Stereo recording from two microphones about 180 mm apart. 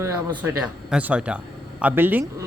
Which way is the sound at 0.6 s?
5° right (ahead or behind).